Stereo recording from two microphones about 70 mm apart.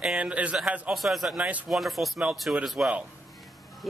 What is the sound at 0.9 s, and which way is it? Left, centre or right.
Speech, centre.